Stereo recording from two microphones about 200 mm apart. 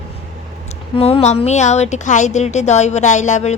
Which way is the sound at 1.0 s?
30° left (ahead or behind).